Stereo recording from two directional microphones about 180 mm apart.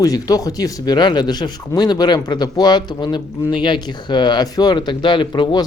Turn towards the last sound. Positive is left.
turn(degrees=25)  # may be behind; listen again after turning